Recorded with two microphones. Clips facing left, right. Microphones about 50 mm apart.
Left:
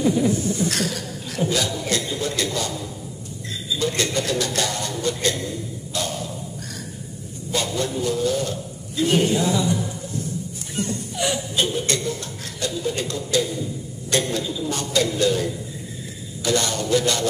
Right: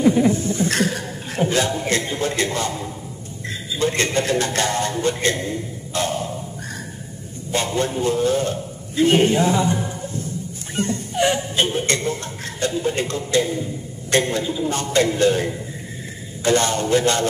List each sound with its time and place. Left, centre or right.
0.0 s chuckle: right
3.7 s a man's voice: right
7.5 s a man's voice: right